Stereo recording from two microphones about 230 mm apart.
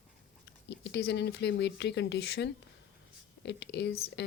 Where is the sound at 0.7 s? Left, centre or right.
Left.